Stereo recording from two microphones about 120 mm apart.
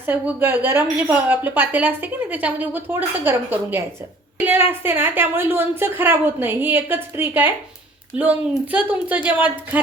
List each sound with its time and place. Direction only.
0.0 s a woman's voice: 15° right (ahead or behind)